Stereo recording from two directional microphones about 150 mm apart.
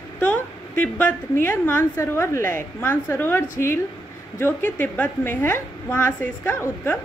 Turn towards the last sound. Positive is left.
turn(degrees=15)  # may be behind; listen again after turning